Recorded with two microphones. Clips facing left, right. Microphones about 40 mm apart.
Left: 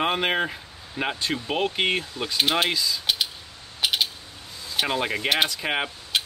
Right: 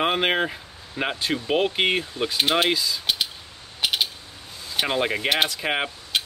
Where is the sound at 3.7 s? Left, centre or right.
Centre.